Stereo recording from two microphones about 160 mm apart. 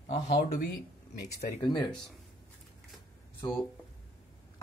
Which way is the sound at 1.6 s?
25° left (ahead or behind).